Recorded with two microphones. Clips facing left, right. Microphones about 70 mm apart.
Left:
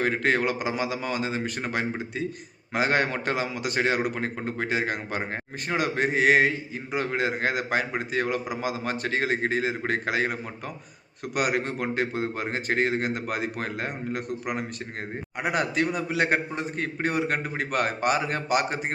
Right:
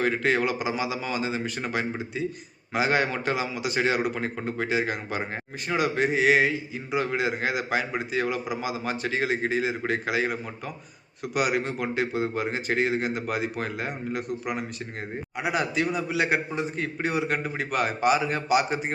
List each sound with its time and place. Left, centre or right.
0.0 s a man's voice: left
11.3 s a man's voice: left